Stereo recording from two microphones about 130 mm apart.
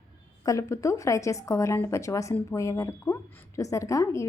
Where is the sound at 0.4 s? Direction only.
25° left (ahead or behind).